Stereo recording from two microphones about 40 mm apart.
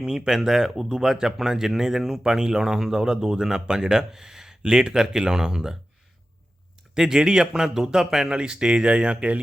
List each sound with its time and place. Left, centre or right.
0.0 s speech: centre
6.9 s speech: centre; by 9.4 s right